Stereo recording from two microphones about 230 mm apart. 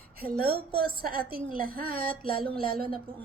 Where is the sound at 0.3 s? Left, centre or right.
Right.